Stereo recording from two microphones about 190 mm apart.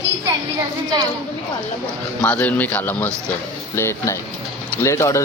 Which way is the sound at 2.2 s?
10° left (ahead or behind).